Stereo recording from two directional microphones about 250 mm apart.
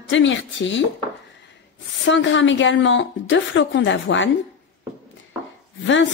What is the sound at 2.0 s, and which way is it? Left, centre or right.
A woman's voice, left.